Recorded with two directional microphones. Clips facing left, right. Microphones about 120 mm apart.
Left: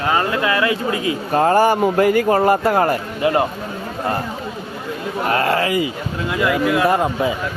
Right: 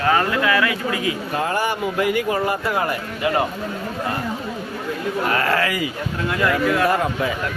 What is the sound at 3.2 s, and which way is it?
Speech, 25° left (ahead or behind).